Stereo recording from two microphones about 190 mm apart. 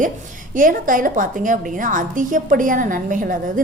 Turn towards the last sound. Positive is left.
turn(degrees=-45)  # may be behind; listen again after turning